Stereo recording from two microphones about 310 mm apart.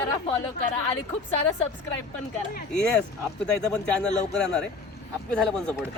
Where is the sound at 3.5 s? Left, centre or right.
Centre.